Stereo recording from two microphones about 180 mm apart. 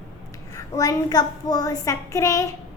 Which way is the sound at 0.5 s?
20° left (ahead or behind).